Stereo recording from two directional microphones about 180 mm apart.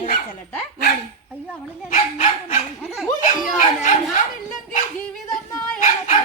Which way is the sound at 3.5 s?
40° left (ahead or behind).